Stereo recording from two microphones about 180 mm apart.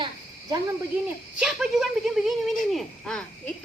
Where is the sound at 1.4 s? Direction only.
Centre (ahead or behind).